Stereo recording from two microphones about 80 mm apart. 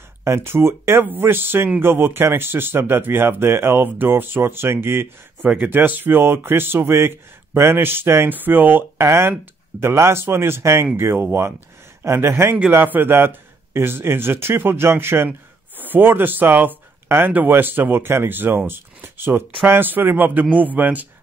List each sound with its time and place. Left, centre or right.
0.2 s speech: right
5.4 s speech: centre
9.0 s speech: right